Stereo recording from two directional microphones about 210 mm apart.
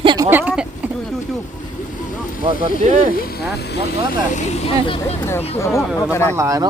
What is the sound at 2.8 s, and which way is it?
Speech, 35° right (ahead or behind).